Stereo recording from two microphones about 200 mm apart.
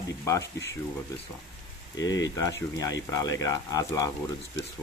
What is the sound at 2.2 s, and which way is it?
Speech, 15° left (ahead or behind).